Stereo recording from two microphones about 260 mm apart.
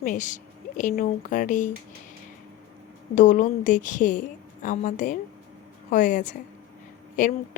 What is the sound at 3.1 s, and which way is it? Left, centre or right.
A woman's voice, left.